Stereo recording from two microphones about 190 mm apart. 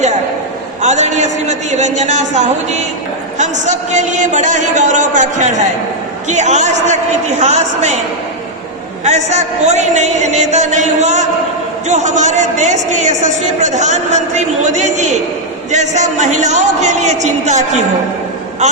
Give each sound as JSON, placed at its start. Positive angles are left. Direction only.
{"t": 0.8, "sound": "a man's voice", "side_deg": -40}
{"t": 9.0, "sound": "a man's voice", "side_deg": -35}